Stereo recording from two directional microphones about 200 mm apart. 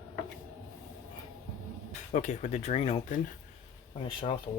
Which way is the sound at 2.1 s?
35° left (ahead or behind).